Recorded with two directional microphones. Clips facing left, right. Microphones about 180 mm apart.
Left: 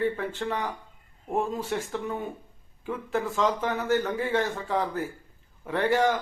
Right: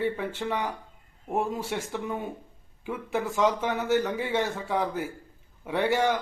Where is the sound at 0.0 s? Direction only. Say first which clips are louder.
Left 1 dB; 10° right (ahead or behind).